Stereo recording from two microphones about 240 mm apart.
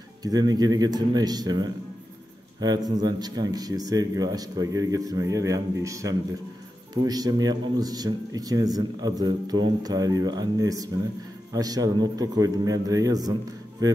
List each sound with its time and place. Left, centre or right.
0.2 s speech: centre